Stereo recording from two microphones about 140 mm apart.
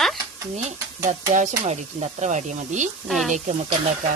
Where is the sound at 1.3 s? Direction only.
60° right (ahead or behind).